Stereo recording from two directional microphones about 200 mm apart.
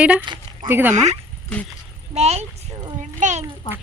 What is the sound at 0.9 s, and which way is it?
Speech, 35° right (ahead or behind).